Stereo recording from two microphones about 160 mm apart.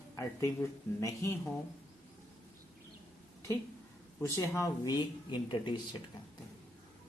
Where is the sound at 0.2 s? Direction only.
20° left (ahead or behind).